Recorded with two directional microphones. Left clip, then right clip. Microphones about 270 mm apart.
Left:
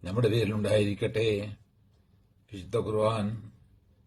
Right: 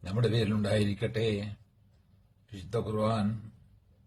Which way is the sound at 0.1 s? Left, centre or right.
Centre.